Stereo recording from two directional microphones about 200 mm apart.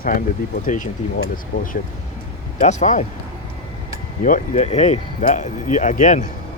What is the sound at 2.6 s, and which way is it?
Speech, 35° left (ahead or behind).